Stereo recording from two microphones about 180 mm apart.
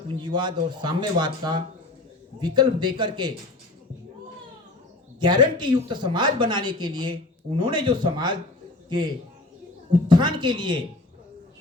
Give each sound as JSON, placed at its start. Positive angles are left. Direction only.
{"t": 0.2, "sound": "speech", "side_deg": -25}
{"t": 5.2, "sound": "speech", "side_deg": -25}